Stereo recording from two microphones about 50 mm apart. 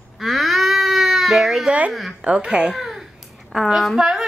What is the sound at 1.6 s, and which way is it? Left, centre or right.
Speech, right.